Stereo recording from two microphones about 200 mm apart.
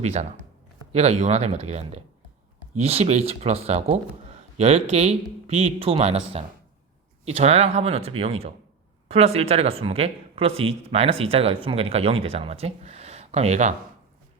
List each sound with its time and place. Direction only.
0.0 s speech: 35° right (ahead or behind)